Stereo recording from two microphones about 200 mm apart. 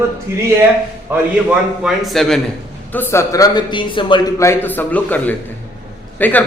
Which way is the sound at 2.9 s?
10° left (ahead or behind).